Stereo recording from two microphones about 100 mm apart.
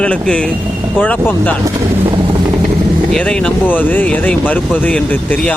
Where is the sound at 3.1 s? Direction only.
10° left (ahead or behind).